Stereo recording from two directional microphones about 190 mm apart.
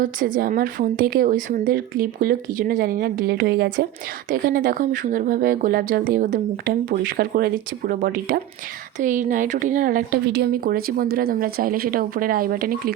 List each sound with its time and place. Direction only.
0.0 s speech: 45° right (ahead or behind)